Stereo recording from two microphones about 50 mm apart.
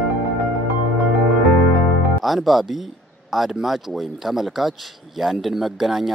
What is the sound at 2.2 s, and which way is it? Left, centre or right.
Speech, centre.